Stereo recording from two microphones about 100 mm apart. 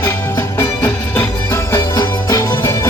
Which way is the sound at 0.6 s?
15° left (ahead or behind).